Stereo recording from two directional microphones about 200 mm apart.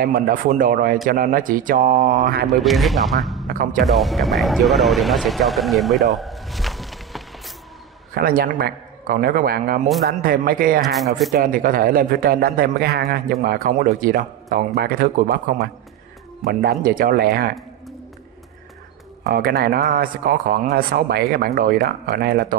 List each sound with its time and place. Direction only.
0.0 s a man's voice: 40° right (ahead or behind)
2.5 s speech: centre (ahead or behind)
3.4 s a man's voice: 45° right (ahead or behind)
3.8 s speech: centre (ahead or behind)
8.1 s a man's voice: 45° right (ahead or behind)
19.2 s a man's voice: 50° right (ahead or behind)